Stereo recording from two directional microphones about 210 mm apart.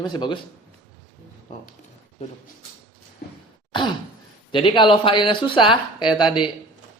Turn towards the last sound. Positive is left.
turn(degrees=20)  # may be behind; listen again after turning